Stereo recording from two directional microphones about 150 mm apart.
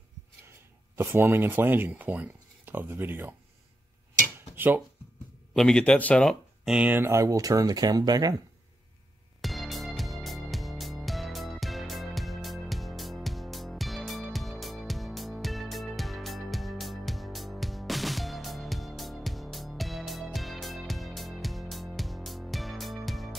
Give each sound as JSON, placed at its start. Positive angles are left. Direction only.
{"t": 0.9, "sound": "speech", "side_deg": -15}
{"t": 4.6, "sound": "speech", "side_deg": -10}
{"t": 5.5, "sound": "speech", "side_deg": 5}
{"t": 9.4, "sound": "music", "side_deg": 0}